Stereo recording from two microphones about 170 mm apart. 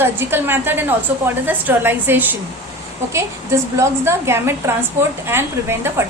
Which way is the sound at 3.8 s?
15° right (ahead or behind).